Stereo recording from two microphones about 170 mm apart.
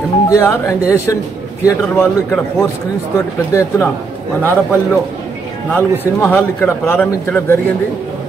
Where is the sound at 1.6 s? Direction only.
15° left (ahead or behind).